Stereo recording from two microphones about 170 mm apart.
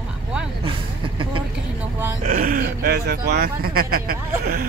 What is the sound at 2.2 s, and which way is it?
Speech, 55° right (ahead or behind).